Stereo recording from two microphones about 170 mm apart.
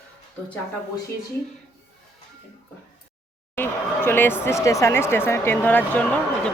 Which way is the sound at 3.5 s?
15° left (ahead or behind).